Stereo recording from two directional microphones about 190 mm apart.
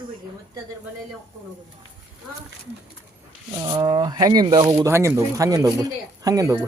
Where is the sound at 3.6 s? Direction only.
20° right (ahead or behind).